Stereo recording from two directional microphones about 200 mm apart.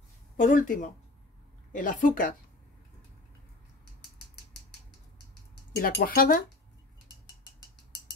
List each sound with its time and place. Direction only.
0.4 s speech: 40° left (ahead or behind)
5.8 s speech: 50° left (ahead or behind)